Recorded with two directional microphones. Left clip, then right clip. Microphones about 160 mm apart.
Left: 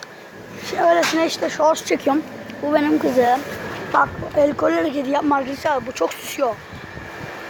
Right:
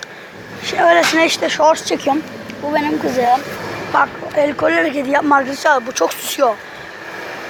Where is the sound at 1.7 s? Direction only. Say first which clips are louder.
Right 2 dB; 30° left (ahead or behind).